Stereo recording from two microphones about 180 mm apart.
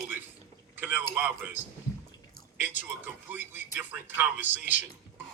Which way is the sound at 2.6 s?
10° right (ahead or behind).